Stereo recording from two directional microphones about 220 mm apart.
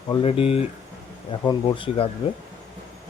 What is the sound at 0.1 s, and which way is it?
Speech, 25° left (ahead or behind).